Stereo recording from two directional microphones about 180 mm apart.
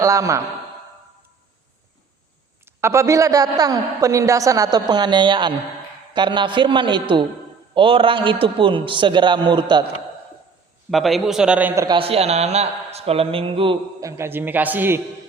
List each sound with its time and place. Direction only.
0.0 s a man's voice: 15° right (ahead or behind)
2.6 s a woman's voice: 15° right (ahead or behind)
10.9 s a man's voice: centre (ahead or behind); by 11.9 s 15° right (ahead or behind)
11.9 s speech: 35° right (ahead or behind)
14.0 s a man's voice: 15° right (ahead or behind)